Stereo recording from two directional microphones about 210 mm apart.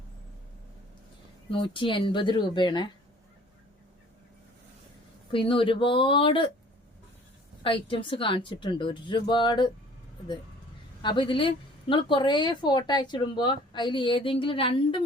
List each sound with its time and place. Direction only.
1.5 s a woman's voice: 25° left (ahead or behind)
5.3 s a woman's voice: 25° left (ahead or behind)
7.6 s a woman's voice: 25° left (ahead or behind)
11.0 s a woman's voice: 20° left (ahead or behind)